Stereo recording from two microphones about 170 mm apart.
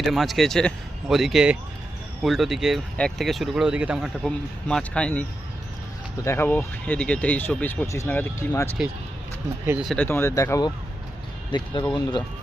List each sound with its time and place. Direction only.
0.0 s speech: centre (ahead or behind)
6.2 s speech: 15° left (ahead or behind)
9.8 s speech: 5° left (ahead or behind); by 11.9 s 25° left (ahead or behind)